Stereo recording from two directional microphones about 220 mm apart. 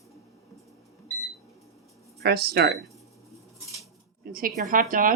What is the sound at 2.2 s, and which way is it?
Speech, 45° right (ahead or behind).